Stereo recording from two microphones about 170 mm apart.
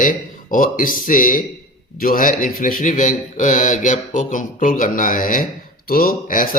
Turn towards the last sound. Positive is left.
turn(degrees=55)  # may be behind; listen again after turning